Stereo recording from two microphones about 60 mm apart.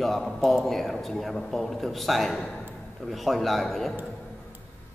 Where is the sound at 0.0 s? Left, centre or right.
Centre.